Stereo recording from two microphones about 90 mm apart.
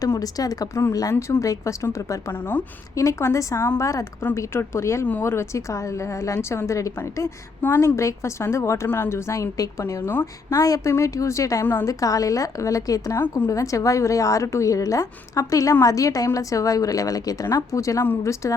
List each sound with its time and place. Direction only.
0.1 s a woman's voice: 40° left (ahead or behind)
1.1 s a woman's voice: 25° left (ahead or behind)
2.3 s a woman's voice: 20° left (ahead or behind)
2.9 s a woman's voice: 35° left (ahead or behind)
11.6 s a woman's voice: 25° left (ahead or behind)
11.9 s a woman's voice: 40° left (ahead or behind)